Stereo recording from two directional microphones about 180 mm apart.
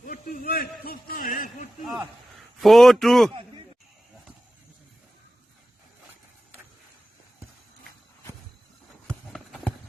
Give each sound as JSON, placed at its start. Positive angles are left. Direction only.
{"t": 0.0, "sound": "a man's voice", "side_deg": 50}
{"t": 1.8, "sound": "a man's voice", "side_deg": 0}
{"t": 9.0, "sound": "run", "side_deg": 5}